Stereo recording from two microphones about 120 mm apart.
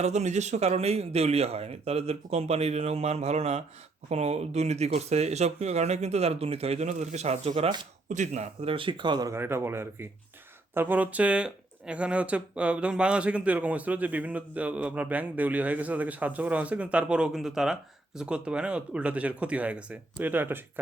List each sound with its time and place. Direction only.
0.0 s speech: 70° right (ahead or behind)
8.1 s speech: 80° right
8.6 s speech: 45° right (ahead or behind)
9.3 s speech: 20° right (ahead or behind)